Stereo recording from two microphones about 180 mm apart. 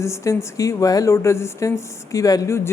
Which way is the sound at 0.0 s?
15° left (ahead or behind).